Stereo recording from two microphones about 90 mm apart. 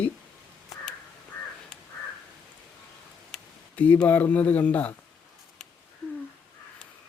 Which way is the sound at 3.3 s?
5° left (ahead or behind).